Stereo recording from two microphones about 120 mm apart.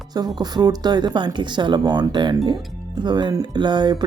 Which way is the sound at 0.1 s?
35° right (ahead or behind).